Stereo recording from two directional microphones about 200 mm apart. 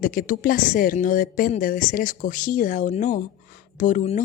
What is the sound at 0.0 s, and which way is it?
A woman's voice, 45° left (ahead or behind).